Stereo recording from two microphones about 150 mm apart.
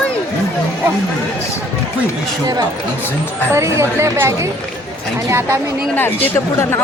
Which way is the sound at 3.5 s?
20° right (ahead or behind).